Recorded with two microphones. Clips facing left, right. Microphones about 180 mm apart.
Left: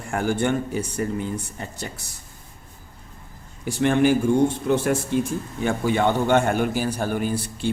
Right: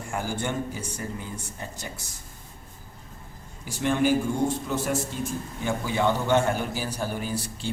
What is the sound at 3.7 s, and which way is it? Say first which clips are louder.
A man's voice: left 5 dB; 60° left (ahead or behind).